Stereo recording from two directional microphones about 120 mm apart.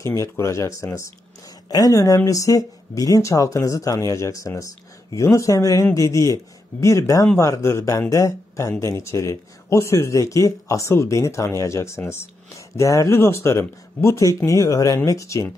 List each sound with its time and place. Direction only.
0.0 s speech: 25° left (ahead or behind)